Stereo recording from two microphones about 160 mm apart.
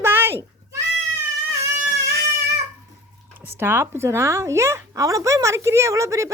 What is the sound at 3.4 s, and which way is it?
Speech, 15° right (ahead or behind).